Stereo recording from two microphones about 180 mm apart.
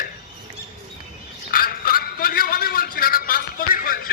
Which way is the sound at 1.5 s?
55° left (ahead or behind).